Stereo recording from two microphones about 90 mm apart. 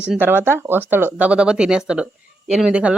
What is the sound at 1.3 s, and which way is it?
Speech, 10° right (ahead or behind).